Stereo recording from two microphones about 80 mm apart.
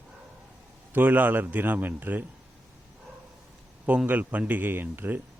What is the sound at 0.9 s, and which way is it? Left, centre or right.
A man's voice, right.